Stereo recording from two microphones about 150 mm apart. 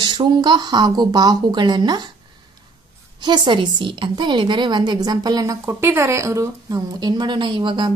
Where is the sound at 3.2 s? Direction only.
30° right (ahead or behind).